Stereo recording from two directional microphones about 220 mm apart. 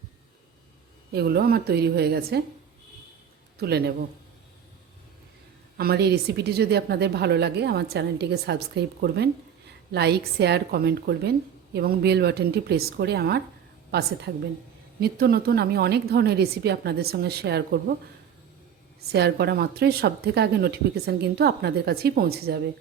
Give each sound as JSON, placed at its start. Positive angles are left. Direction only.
{"t": 1.1, "sound": "a woman's voice", "side_deg": -45}
{"t": 3.6, "sound": "a woman's voice", "side_deg": -45}
{"t": 5.7, "sound": "a woman's voice", "side_deg": -45}
{"t": 15.0, "sound": "a woman's voice", "side_deg": -45}
{"t": 19.1, "sound": "a woman's voice", "side_deg": -50}